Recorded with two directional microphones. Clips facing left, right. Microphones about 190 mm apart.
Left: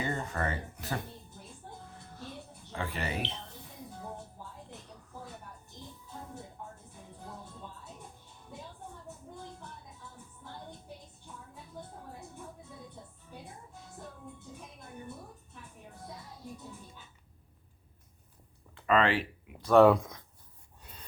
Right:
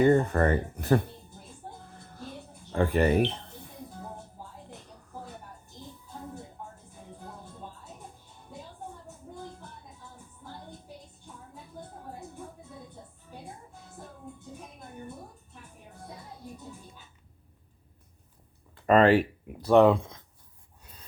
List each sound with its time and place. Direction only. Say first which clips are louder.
0.0 s speech: right 12 dB; 55° right (ahead or behind)
1.6 s music: right 5 dB; 40° right (ahead or behind)
2.7 s speech: right 12 dB; 50° right (ahead or behind)
18.7 s speech: right 7 dB; 40° right (ahead or behind)
19.6 s speech: right 1 dB; 25° right (ahead or behind)